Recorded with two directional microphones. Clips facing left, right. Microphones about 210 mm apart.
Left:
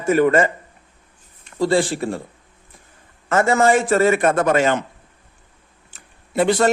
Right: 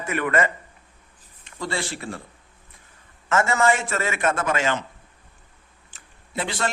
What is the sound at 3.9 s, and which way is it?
Speech, 40° left (ahead or behind).